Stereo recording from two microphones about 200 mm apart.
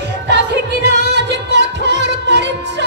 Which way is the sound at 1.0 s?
55° right (ahead or behind).